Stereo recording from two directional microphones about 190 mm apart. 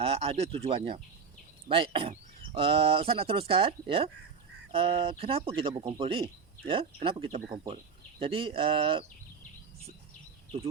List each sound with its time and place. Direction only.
0.0 s speech: 30° right (ahead or behind)